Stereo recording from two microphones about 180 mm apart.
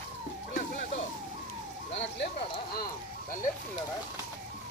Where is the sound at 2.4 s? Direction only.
30° left (ahead or behind).